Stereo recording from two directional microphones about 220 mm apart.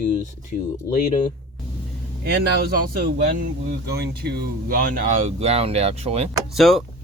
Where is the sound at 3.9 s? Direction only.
50° right (ahead or behind); by 6.3 s 30° right (ahead or behind).